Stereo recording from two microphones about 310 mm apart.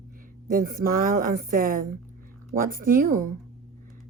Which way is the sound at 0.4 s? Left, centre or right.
Right.